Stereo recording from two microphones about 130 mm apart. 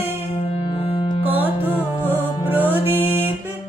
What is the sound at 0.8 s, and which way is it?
Music, 45° left (ahead or behind).